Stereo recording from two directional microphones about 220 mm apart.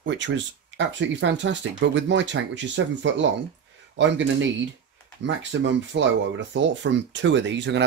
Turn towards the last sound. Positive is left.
turn(degrees=-55)  # may be behind; listen again after turning